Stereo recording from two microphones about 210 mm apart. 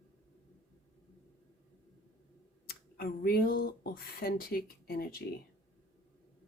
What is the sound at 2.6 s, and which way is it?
Speech, 45° left (ahead or behind).